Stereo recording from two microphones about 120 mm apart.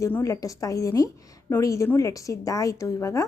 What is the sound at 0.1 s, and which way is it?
A woman's voice, 25° left (ahead or behind).